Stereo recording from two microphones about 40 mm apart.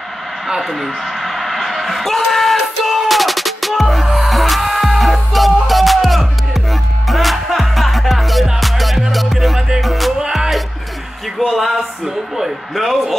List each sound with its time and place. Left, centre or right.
0.6 s a sound: centre
8.5 s music: centre
11.4 s a man's voice: centre